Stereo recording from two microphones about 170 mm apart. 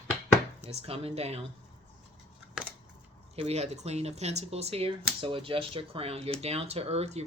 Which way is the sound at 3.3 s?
35° right (ahead or behind).